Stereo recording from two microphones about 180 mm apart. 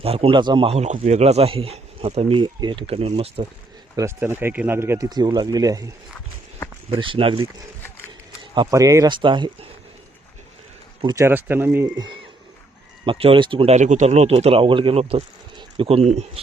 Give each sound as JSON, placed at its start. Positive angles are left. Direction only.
{"t": 0.0, "sound": "a man's voice", "side_deg": -30}
{"t": 3.9, "sound": "speech", "side_deg": -15}
{"t": 6.9, "sound": "speech", "side_deg": -30}
{"t": 8.5, "sound": "speech", "side_deg": -20}
{"t": 11.0, "sound": "speech", "side_deg": -15}
{"t": 13.1, "sound": "a man's voice", "side_deg": -30}